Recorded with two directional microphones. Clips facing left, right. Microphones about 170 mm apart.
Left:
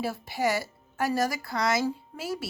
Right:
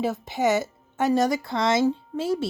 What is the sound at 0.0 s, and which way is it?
Speech, 20° right (ahead or behind).